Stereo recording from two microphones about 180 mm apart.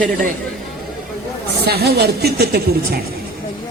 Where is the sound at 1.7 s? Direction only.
65° right (ahead or behind).